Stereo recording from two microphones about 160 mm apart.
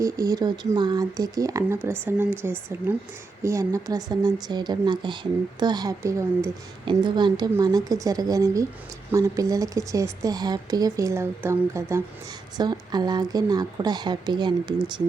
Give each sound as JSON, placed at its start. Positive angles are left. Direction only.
{"t": 0.0, "sound": "speech", "side_deg": -20}
{"t": 6.8, "sound": "speech", "side_deg": -30}